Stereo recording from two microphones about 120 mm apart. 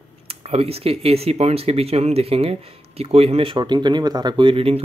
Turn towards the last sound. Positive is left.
turn(degrees=-50)  # may be behind; listen again after turning